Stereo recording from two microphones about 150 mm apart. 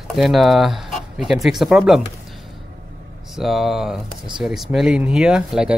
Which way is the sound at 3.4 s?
Centre (ahead or behind).